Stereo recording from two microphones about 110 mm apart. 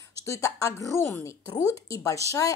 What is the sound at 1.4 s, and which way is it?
Speech, 35° left (ahead or behind).